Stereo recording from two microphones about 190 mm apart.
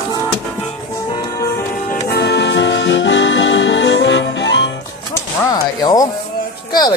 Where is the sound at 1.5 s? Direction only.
50° left (ahead or behind); by 4.7 s 70° left (ahead or behind).